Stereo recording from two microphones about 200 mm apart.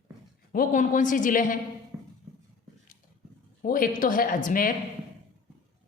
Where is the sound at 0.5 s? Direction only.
40° left (ahead or behind).